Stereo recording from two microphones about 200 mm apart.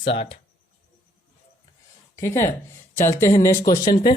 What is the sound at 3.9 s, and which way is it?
Speech, 30° left (ahead or behind).